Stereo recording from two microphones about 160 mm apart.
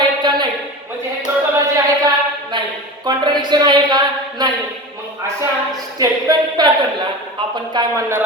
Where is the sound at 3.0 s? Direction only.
25° right (ahead or behind).